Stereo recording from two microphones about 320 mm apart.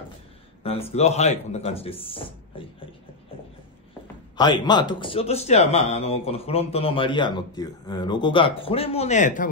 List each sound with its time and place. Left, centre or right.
0.7 s a man's voice: centre
4.4 s a man's voice: centre